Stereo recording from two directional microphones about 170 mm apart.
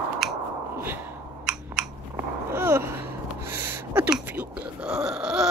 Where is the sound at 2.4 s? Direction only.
15° right (ahead or behind).